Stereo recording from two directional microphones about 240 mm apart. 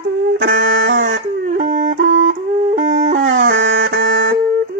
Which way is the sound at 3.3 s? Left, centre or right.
Right.